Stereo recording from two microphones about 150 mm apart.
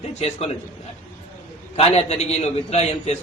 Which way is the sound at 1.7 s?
45° left (ahead or behind).